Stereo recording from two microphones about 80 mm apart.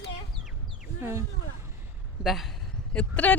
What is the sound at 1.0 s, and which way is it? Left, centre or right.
Speech, right.